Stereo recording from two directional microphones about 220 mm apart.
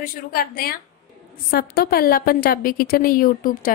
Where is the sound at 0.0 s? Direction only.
40° left (ahead or behind).